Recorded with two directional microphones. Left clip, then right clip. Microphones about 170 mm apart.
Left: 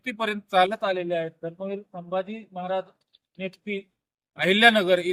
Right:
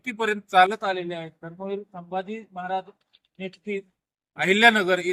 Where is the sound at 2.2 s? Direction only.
65° left (ahead or behind).